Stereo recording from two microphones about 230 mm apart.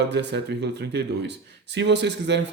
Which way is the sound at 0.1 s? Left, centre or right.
Right.